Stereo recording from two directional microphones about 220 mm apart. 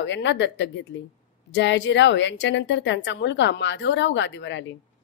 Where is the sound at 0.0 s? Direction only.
55° left (ahead or behind).